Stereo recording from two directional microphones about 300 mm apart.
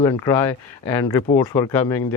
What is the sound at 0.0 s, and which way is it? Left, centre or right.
Speech, centre.